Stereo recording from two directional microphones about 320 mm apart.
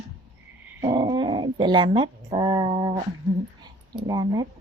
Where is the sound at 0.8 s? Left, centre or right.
Centre.